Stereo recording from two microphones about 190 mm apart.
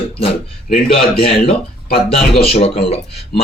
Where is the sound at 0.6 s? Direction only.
30° left (ahead or behind).